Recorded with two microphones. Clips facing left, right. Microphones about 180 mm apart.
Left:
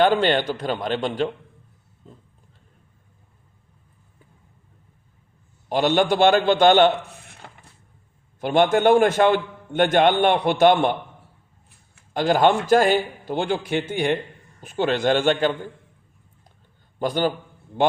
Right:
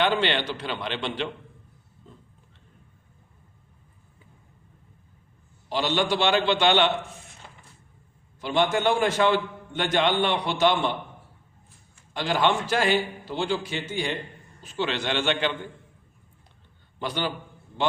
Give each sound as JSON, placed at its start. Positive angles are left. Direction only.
{"t": 0.0, "sound": "a man's voice", "side_deg": 45}
{"t": 5.6, "sound": "a man's voice", "side_deg": 50}
{"t": 12.1, "sound": "a man's voice", "side_deg": 50}
{"t": 17.0, "sound": "a man's voice", "side_deg": 45}